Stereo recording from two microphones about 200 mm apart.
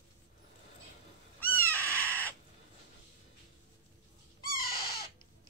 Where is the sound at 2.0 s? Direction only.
10° left (ahead or behind).